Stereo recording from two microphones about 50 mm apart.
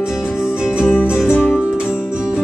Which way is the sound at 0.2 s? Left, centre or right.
Centre.